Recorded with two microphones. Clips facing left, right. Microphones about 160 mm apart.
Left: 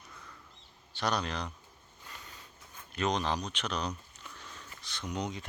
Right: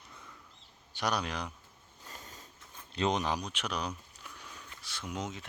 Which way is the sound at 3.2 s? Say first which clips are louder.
Even; 10° right (ahead or behind).